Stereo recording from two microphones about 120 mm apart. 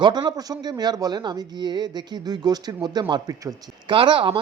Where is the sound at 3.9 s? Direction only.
45° right (ahead or behind).